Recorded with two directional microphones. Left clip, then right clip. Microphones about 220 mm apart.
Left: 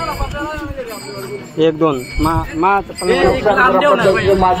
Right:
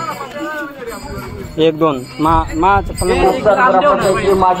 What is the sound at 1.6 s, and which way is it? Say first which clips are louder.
Speech: right 1 dB; 5° right (ahead or behind).